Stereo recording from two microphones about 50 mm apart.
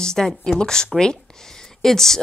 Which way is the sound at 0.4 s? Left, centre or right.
Centre.